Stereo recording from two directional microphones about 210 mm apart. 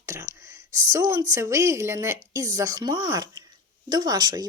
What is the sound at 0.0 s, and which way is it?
Whispering, 15° right (ahead or behind).